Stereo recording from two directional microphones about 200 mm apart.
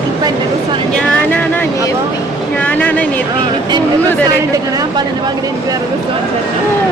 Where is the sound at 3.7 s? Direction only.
20° right (ahead or behind).